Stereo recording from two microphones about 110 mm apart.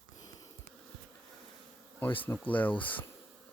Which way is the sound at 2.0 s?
15° left (ahead or behind).